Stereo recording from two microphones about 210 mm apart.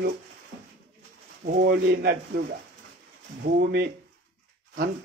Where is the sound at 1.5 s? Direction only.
45° right (ahead or behind).